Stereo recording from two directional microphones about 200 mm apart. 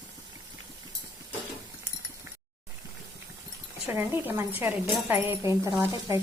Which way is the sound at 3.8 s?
10° right (ahead or behind).